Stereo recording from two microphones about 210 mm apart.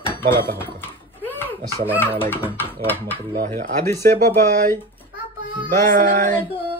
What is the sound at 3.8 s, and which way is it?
Speech, 10° left (ahead or behind).